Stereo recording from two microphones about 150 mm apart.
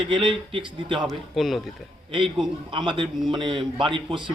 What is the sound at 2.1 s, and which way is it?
A man's voice, 35° right (ahead or behind).